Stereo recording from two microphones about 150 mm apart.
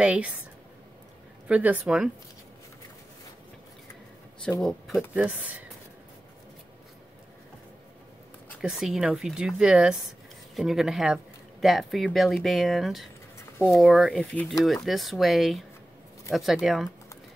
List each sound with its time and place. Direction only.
0.0 s speech: 10° right (ahead or behind)
1.5 s speech: 10° right (ahead or behind)
4.6 s speech: centre (ahead or behind)
8.5 s speech: 5° right (ahead or behind)